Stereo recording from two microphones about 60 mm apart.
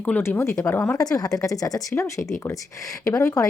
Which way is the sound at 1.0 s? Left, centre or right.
Left.